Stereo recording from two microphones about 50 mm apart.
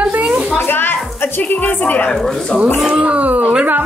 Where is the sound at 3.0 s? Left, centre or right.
Right.